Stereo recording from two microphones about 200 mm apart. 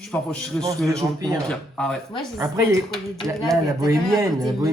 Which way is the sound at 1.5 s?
5° left (ahead or behind).